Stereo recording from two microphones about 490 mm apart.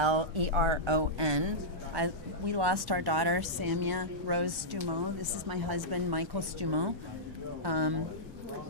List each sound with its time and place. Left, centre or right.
0.0 s a woman's voice: right